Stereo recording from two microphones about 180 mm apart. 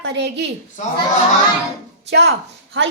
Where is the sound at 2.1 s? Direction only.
70° right (ahead or behind).